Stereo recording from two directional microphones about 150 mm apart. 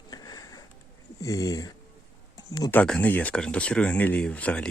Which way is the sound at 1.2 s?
20° left (ahead or behind).